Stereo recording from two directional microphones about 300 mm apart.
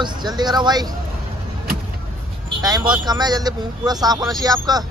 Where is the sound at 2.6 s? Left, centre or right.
Centre.